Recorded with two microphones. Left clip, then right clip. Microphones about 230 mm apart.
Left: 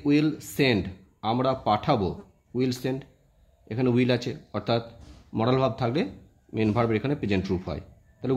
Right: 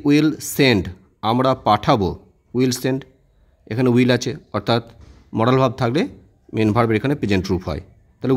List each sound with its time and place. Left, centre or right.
0.0 s speech: right